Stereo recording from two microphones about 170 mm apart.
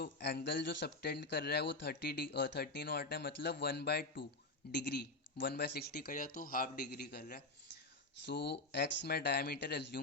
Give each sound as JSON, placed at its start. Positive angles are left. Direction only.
{"t": 0.0, "sound": "speech", "side_deg": 70}
{"t": 8.3, "sound": "speech", "side_deg": 80}